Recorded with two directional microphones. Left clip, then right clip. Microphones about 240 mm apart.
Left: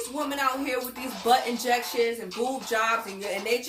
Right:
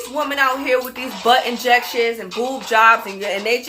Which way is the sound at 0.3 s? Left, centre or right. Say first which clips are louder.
Right 10 dB; centre.